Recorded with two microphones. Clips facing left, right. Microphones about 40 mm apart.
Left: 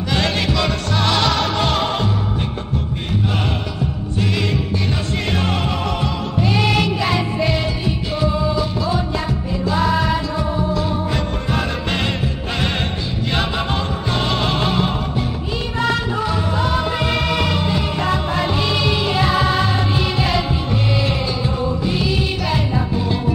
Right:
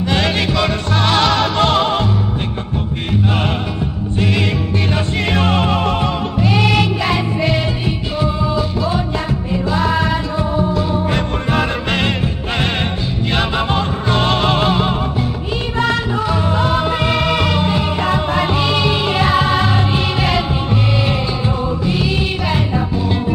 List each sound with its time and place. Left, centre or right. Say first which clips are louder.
0.1 s music: right 1 dB; centre
4.2 s music: right 3 dB; right
11.1 s music: right 4 dB; right
13.3 s music: right 4 dB; centre
16.3 s music: right 5 dB; right